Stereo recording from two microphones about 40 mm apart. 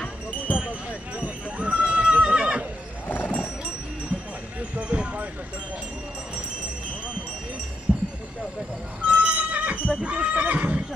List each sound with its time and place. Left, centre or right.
0.0 s basketball bounce: left
0.6 s neigh: right
3.1 s a sound: left
4.6 s clip-clop: right
7.9 s a sound: right
9.8 s horse: right